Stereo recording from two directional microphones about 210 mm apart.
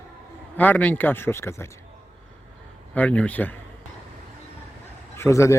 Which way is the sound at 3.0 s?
5° left (ahead or behind).